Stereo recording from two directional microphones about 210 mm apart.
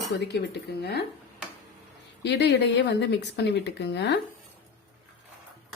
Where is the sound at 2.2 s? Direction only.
55° left (ahead or behind).